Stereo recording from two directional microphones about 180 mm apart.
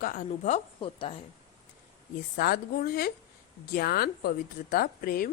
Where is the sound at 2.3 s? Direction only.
50° left (ahead or behind).